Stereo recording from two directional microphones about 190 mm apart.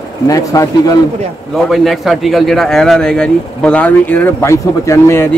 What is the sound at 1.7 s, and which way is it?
Speech, centre (ahead or behind).